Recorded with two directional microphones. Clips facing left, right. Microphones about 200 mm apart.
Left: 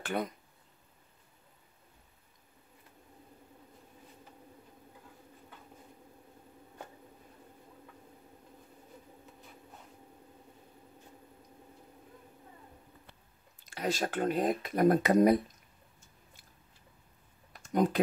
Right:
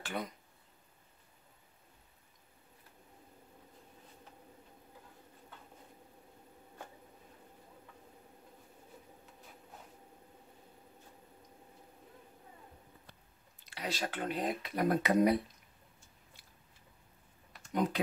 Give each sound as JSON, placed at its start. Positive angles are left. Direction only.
{"t": 0.0, "sound": "speech", "side_deg": 55}
{"t": 13.7, "sound": "speech", "side_deg": 45}
{"t": 17.5, "sound": "typing", "side_deg": 40}